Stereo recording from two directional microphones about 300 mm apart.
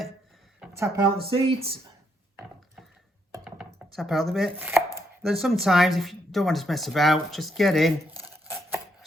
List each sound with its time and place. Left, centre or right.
0.6 s a sound: centre
1.3 s speech: centre
3.3 s chopping: centre
4.9 s speech: centre
8.5 s chopping: centre